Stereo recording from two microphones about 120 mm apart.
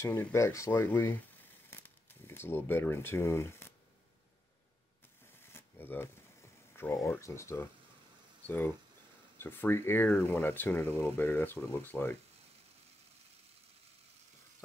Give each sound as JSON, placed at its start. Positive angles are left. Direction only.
{"t": 0.0, "sound": "speech", "side_deg": 20}
{"t": 5.4, "sound": "a sound", "side_deg": 20}
{"t": 6.7, "sound": "speech", "side_deg": 20}